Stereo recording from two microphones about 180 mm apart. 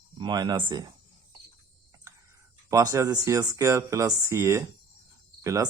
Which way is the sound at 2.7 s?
20° right (ahead or behind).